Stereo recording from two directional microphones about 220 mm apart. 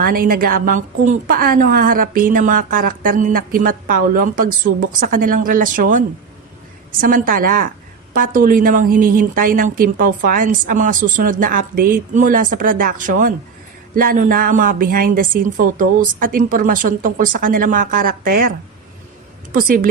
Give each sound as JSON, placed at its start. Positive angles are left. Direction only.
{"t": 0.0, "sound": "a woman's voice", "side_deg": -40}
{"t": 19.5, "sound": "a woman's voice", "side_deg": -40}